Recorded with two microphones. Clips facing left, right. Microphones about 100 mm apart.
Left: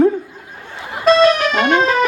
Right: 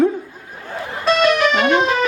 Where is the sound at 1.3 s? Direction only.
45° left (ahead or behind).